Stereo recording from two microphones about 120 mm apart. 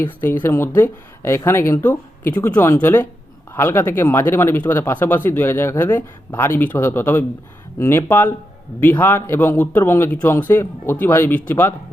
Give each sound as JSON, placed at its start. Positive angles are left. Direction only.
{"t": 0.0, "sound": "a man's voice", "side_deg": 15}